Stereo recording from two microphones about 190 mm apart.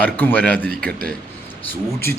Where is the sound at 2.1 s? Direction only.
55° right (ahead or behind).